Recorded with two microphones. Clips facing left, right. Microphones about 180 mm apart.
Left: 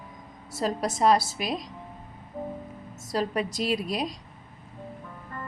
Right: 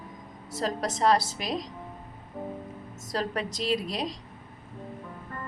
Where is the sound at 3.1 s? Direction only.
10° left (ahead or behind).